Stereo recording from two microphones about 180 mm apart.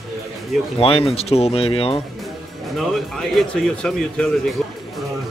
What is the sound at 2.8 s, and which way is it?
Speech, centre (ahead or behind).